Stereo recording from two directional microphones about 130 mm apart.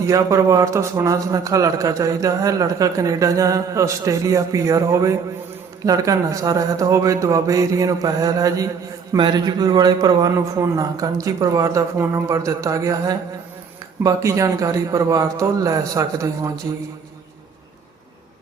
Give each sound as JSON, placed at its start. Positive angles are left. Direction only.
{"t": 0.0, "sound": "a man's voice", "side_deg": -25}